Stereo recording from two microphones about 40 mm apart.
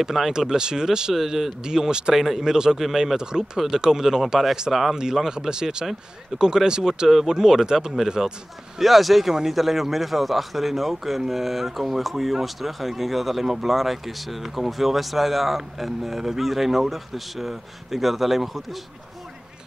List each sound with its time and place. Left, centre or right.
0.0 s speech: centre
2.1 s a man's voice: centre
3.2 s speech: centre
8.7 s a man's voice: centre
9.3 s a man's voice: centre